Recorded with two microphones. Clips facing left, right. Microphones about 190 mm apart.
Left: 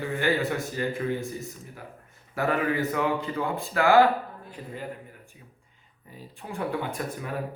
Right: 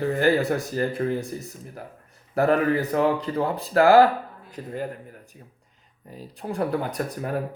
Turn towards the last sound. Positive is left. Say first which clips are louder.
# right 4 dB
turn(degrees=-40)  # may be behind; listen again after turning